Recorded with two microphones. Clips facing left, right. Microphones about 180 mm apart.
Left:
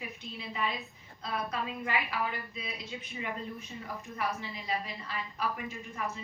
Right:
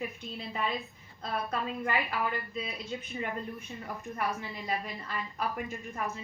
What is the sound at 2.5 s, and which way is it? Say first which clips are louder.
A woman's voice: right 4 dB; 50° right (ahead or behind).